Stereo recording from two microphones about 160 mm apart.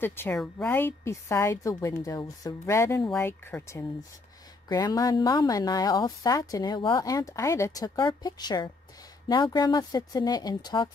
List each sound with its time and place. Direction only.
0.0 s a woman's voice: 15° left (ahead or behind)